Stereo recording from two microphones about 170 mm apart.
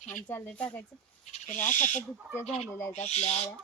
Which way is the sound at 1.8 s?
45° left (ahead or behind).